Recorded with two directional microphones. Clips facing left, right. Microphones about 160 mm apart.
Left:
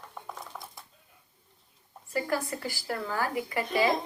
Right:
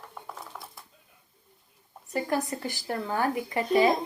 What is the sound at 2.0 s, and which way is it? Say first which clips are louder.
Speech: right 2 dB; 20° right (ahead or behind).